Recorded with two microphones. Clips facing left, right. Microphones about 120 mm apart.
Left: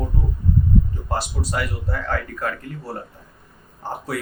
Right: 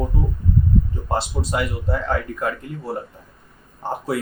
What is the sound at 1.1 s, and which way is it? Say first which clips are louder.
Speech: right 4 dB; 25° right (ahead or behind).